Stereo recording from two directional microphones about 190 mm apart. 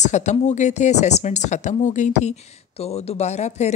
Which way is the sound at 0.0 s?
40° left (ahead or behind).